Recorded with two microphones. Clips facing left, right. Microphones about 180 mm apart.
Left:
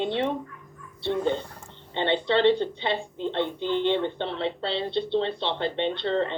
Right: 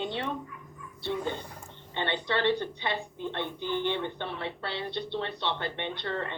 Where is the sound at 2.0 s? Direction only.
25° left (ahead or behind).